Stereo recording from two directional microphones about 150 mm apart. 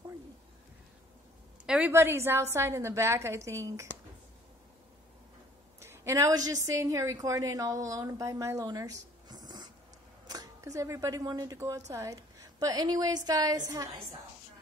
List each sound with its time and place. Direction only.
1.9 s a woman's voice: 15° right (ahead or behind)
5.8 s a woman's voice: 20° right (ahead or behind)